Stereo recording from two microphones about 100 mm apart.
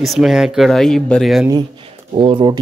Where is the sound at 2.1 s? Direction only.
60° right (ahead or behind).